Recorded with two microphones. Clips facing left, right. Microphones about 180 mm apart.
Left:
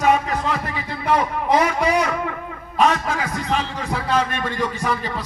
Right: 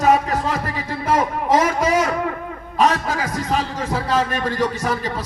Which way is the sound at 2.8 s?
40° right (ahead or behind).